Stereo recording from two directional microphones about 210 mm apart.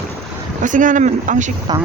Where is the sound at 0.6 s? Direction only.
35° right (ahead or behind).